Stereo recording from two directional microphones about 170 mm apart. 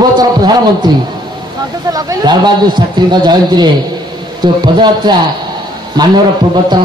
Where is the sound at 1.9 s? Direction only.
25° right (ahead or behind).